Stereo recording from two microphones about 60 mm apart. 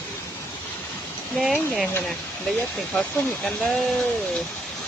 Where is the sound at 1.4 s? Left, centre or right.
Centre.